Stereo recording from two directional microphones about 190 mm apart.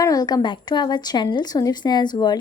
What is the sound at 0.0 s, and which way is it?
A woman's voice, 20° left (ahead or behind).